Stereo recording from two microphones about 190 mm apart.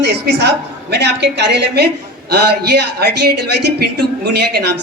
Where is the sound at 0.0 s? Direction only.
65° right (ahead or behind).